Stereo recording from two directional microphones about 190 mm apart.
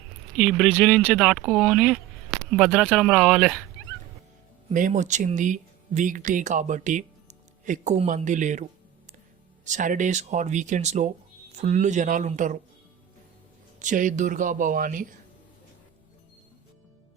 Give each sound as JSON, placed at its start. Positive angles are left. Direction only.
{"t": 0.3, "sound": "speech", "side_deg": 0}
{"t": 4.7, "sound": "speech", "side_deg": -40}
{"t": 9.6, "sound": "speech", "side_deg": -40}
{"t": 13.7, "sound": "speech", "side_deg": -40}